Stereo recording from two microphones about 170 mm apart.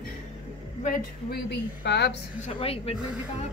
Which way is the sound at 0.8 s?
65° left (ahead or behind).